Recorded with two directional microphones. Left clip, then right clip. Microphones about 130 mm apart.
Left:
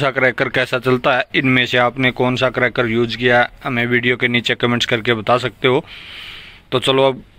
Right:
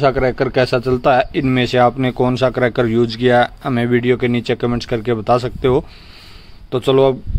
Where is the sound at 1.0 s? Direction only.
10° right (ahead or behind); by 4.0 s 30° right (ahead or behind).